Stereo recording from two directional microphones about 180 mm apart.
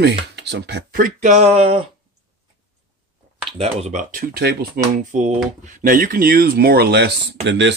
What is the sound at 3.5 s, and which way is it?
Speech, 35° right (ahead or behind).